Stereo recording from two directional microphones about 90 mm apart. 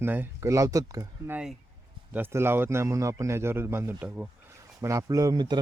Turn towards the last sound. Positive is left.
turn(degrees=-55)  # may be behind; listen again after turning